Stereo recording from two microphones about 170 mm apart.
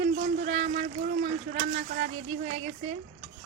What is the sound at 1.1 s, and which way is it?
Speech, 60° right (ahead or behind).